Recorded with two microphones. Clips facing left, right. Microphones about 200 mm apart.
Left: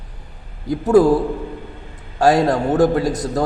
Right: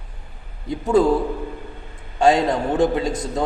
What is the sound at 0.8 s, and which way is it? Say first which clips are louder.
Speech: left 4 dB; 10° left (ahead or behind).